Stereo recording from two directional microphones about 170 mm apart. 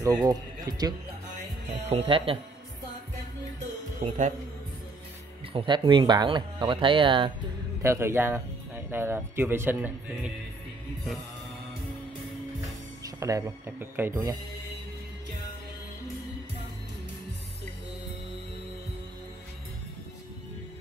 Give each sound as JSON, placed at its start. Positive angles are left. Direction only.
{"t": 0.0, "sound": "speech", "side_deg": -20}
{"t": 1.9, "sound": "speech", "side_deg": -35}
{"t": 4.0, "sound": "speech", "side_deg": -50}
{"t": 5.5, "sound": "speech", "side_deg": -30}
{"t": 7.8, "sound": "speech", "side_deg": -15}
{"t": 13.0, "sound": "speech", "side_deg": -20}